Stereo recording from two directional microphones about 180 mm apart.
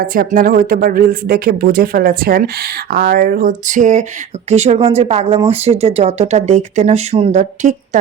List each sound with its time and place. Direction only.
0.0 s speech: 55° right (ahead or behind)